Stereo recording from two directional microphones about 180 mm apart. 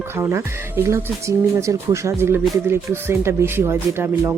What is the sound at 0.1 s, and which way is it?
Speech, 15° right (ahead or behind).